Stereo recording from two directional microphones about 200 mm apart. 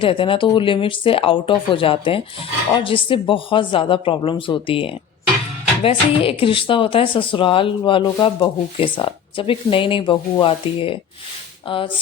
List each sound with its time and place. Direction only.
0.0 s speech: 25° left (ahead or behind)